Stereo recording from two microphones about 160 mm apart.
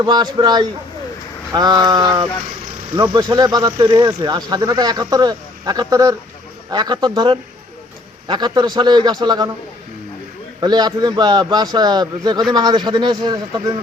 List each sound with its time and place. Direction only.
0.0 s speech: 25° right (ahead or behind)
10.6 s speech: 25° right (ahead or behind)